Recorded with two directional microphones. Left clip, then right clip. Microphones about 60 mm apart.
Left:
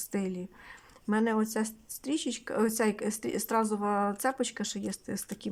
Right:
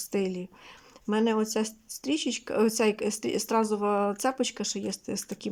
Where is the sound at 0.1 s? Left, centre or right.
Right.